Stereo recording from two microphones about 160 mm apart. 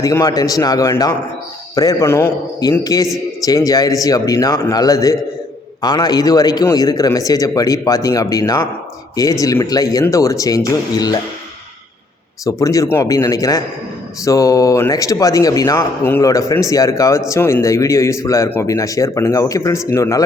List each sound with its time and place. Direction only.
0.0 s a man's voice: 20° left (ahead or behind)
12.5 s a man's voice: 20° left (ahead or behind)